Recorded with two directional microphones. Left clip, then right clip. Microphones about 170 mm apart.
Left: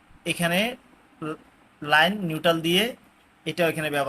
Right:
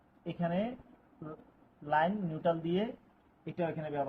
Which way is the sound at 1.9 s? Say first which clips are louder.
Left 10 dB; 20° left (ahead or behind).